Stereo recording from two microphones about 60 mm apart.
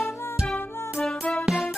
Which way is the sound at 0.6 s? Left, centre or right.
Left.